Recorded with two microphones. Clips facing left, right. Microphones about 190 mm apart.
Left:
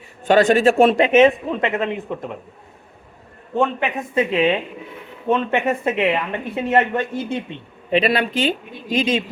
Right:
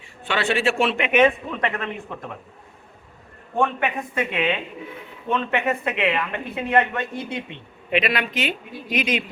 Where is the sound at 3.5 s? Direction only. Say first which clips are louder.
Left 2 dB; 25° left (ahead or behind).